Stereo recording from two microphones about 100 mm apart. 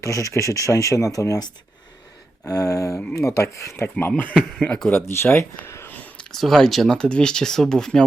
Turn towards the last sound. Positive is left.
turn(degrees=5)  # may be behind; listen again after turning